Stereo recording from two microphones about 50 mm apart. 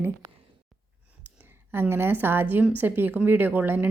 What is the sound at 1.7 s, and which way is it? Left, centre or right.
A woman's voice, right.